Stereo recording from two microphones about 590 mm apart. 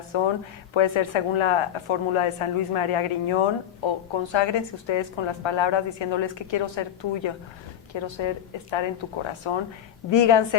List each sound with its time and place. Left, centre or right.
0.1 s speech: left